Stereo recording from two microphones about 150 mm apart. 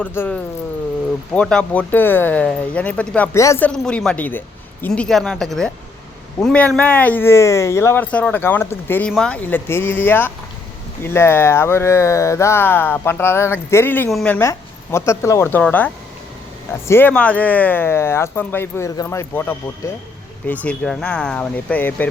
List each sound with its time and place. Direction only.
0.0 s speech: 10° left (ahead or behind)
3.3 s speech: 20° left (ahead or behind)
3.7 s speech: 5° left (ahead or behind)
14.1 s speech: centre (ahead or behind)
14.3 s speech: 15° left (ahead or behind)
16.9 s speech: 10° left (ahead or behind)